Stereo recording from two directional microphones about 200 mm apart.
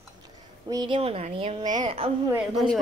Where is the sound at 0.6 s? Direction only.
20° right (ahead or behind).